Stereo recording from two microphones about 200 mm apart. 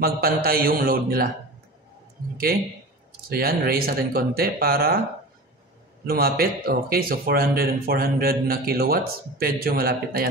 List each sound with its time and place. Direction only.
0.0 s speech: 50° right (ahead or behind)
3.1 s speech: 50° right (ahead or behind)
6.0 s speech: 50° right (ahead or behind)